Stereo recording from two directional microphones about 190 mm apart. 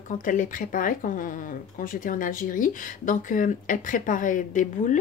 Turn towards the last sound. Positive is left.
turn(degrees=45)  # may be behind; listen again after turning